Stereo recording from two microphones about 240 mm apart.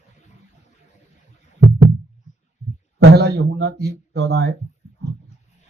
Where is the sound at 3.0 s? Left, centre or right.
Right.